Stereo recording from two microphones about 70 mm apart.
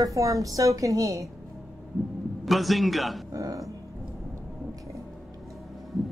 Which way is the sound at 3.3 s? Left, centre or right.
Right.